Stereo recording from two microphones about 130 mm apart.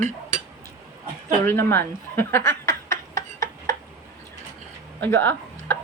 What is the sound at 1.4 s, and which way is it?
Speech, 20° left (ahead or behind).